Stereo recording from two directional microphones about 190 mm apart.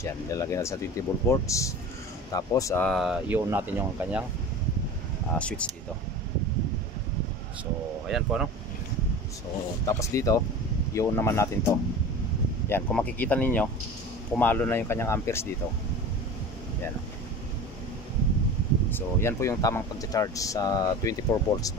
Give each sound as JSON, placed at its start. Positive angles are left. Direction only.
{"t": 0.0, "sound": "speech", "side_deg": 15}
{"t": 2.9, "sound": "speech", "side_deg": 0}
{"t": 5.3, "sound": "speech", "side_deg": 5}
{"t": 8.1, "sound": "speech", "side_deg": -5}
{"t": 9.8, "sound": "speech", "side_deg": 15}
{"t": 18.9, "sound": "speech", "side_deg": 10}